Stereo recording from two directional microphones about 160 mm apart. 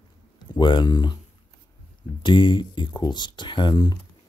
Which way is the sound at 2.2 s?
30° left (ahead or behind).